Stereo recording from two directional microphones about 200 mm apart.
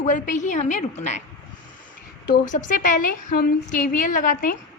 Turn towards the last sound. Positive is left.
turn(degrees=45)  # may be behind; listen again after turning